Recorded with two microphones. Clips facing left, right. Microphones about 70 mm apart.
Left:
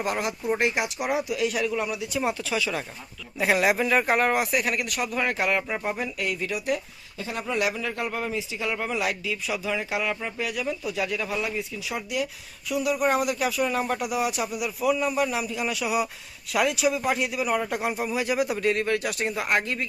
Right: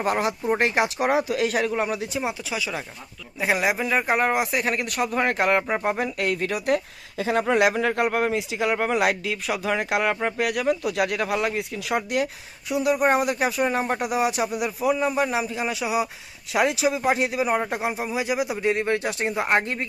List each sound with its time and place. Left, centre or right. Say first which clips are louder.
0.0 s speech: right 4 dB; right
1.1 s speech: right 4 dB; right
2.2 s speech: left 2 dB; centre
4.6 s speech: right 3 dB; right
6.0 s speech: right 4 dB; right
7.2 s speech: right 7 dB; right
8.7 s speech: right 6 dB; right
12.6 s speech: right 3 dB; right